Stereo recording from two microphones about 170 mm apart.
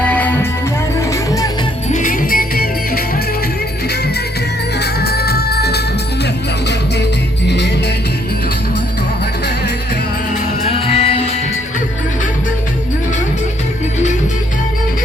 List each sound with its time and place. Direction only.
0.0 s music: 10° left (ahead or behind)
1.1 s music: 20° left (ahead or behind)
1.9 s music: 50° left (ahead or behind)
4.8 s music: 70° left (ahead or behind)
7.4 s music: 90° left
10.6 s music: 35° left (ahead or behind)